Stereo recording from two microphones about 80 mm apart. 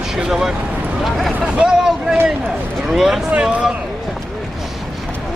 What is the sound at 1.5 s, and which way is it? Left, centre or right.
A man's voice, centre.